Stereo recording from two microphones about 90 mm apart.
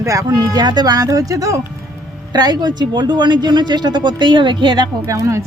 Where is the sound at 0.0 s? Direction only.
40° right (ahead or behind).